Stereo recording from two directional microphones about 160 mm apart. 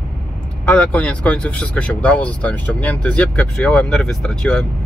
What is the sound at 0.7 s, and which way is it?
Speech, 10° left (ahead or behind).